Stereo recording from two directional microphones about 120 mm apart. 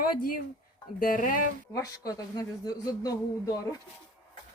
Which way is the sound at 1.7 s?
30° left (ahead or behind).